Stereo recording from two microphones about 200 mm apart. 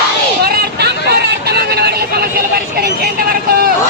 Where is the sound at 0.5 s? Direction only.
55° right (ahead or behind).